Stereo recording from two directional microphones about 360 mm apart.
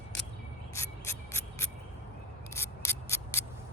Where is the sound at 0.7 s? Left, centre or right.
Centre.